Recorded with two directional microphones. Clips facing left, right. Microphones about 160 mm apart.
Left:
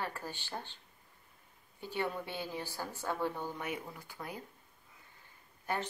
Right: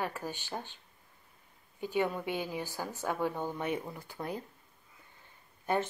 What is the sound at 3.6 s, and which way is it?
Speech, 30° right (ahead or behind).